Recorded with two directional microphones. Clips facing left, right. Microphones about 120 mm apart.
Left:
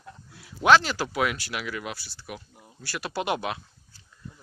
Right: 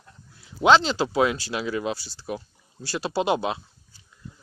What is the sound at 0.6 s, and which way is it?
Speech, 20° right (ahead or behind).